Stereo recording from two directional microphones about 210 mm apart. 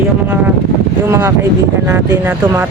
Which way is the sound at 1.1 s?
15° right (ahead or behind).